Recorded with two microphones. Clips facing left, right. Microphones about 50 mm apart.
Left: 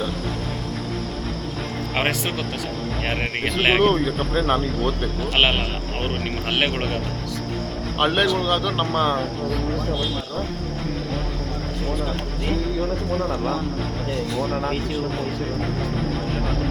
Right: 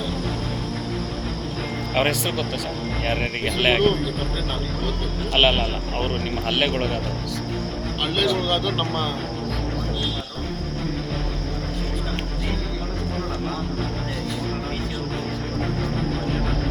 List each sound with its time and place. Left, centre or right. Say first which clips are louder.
3.1 s speech: even; centre
5.4 s speech: right 1 dB; centre
8.0 s speech: left 4 dB; centre
8.3 s speech: left 1 dB; centre